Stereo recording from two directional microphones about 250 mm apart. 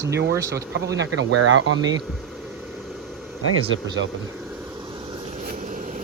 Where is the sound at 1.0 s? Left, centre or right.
Right.